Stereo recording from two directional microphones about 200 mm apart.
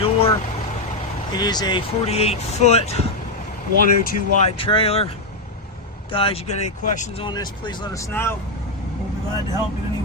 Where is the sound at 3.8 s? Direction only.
45° left (ahead or behind).